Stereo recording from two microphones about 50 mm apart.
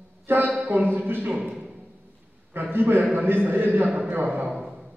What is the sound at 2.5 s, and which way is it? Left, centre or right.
A woman's voice, right.